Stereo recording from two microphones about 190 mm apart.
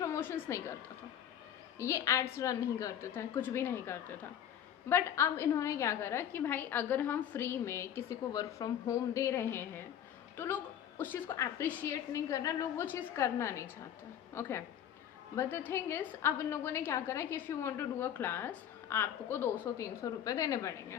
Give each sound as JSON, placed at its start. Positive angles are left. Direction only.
{"t": 0.0, "sound": "a woman's voice", "side_deg": 15}
{"t": 1.8, "sound": "a woman's voice", "side_deg": 15}